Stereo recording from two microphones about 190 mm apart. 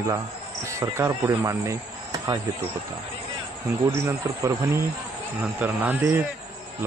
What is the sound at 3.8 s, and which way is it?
Speech, 15° right (ahead or behind).